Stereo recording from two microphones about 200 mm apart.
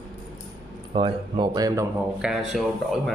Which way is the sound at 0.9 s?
25° right (ahead or behind).